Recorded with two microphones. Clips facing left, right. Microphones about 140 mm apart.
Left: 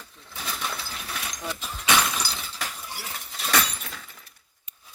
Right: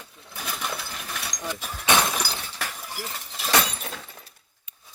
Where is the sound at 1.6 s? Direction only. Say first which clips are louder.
Right 2 dB; 20° right (ahead or behind).